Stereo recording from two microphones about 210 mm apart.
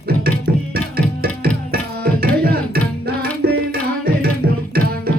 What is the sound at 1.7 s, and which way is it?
Tabla, 45° right (ahead or behind).